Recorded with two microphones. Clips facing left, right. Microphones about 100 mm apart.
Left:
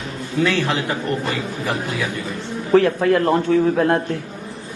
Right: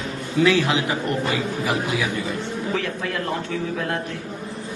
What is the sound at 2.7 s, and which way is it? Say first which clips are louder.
Speech: left 16 dB; 50° left (ahead or behind).